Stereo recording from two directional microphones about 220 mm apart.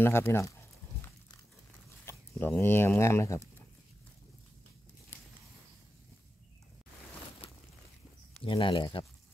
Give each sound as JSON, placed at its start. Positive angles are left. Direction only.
{"t": 0.0, "sound": "speech", "side_deg": 10}
{"t": 2.0, "sound": "speech", "side_deg": 10}
{"t": 8.5, "sound": "speech", "side_deg": 20}